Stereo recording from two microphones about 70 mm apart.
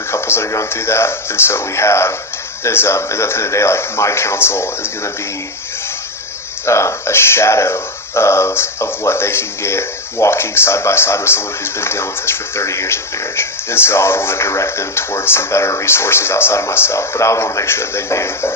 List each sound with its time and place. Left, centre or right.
0.1 s speech: left
6.7 s speech: left